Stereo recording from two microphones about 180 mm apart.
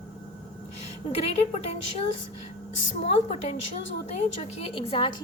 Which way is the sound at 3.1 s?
35° left (ahead or behind).